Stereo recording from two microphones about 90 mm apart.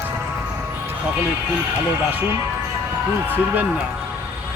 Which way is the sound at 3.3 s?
20° right (ahead or behind).